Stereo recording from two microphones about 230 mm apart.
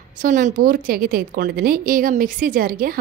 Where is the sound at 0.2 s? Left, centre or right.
Right.